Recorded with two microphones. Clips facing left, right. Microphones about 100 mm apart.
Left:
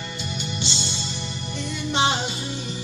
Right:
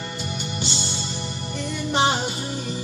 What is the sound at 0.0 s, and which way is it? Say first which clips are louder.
Music: right 1 dB; 45° right (ahead or behind).